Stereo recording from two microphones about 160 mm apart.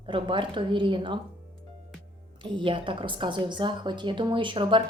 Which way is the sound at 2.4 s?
30° right (ahead or behind).